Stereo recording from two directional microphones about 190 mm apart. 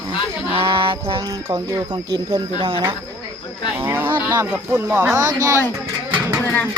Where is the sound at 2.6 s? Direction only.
30° right (ahead or behind).